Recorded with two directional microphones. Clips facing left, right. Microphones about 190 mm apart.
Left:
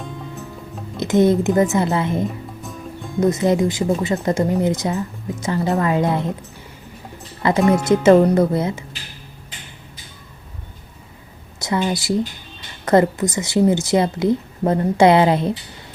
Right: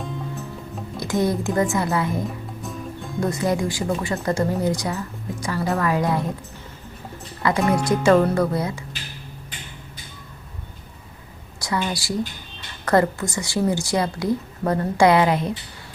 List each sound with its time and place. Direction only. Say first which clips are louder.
0.9 s speech: left 7 dB; 20° left (ahead or behind)
7.6 s speech: left 5 dB; centre (ahead or behind)
7.9 s speech: left 5 dB; 25° left (ahead or behind)
11.6 s speech: left 5 dB; 25° left (ahead or behind)